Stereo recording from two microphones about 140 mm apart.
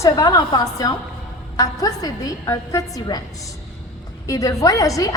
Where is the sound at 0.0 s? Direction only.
30° left (ahead or behind).